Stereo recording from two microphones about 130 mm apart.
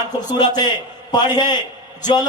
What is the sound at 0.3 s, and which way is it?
Speech, 30° left (ahead or behind).